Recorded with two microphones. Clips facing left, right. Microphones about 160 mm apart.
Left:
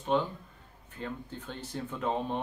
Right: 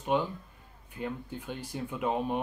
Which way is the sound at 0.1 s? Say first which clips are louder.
Even; 10° right (ahead or behind).